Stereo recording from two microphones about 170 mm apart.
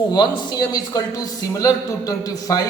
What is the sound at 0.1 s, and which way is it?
Speech, 25° left (ahead or behind).